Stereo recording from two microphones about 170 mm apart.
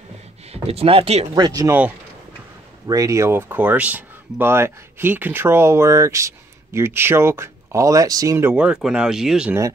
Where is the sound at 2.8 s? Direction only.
20° right (ahead or behind); by 9.5 s 5° right (ahead or behind).